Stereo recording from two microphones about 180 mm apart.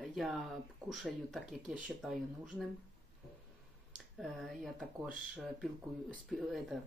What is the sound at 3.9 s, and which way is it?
Speech, centre (ahead or behind).